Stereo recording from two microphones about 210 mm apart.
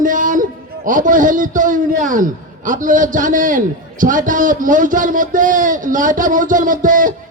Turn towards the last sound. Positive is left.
turn(degrees=-40)  # may be behind; listen again after turning